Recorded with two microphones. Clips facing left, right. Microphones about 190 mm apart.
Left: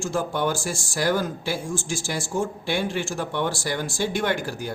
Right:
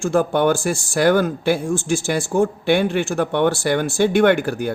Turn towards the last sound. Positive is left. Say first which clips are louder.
# right 10 dB
turn(degrees=-60)  # may be behind; listen again after turning